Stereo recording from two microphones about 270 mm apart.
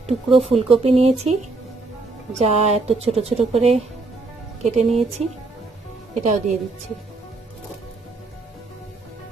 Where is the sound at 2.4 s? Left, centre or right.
Right.